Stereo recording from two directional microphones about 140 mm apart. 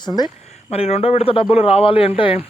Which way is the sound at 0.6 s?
45° left (ahead or behind).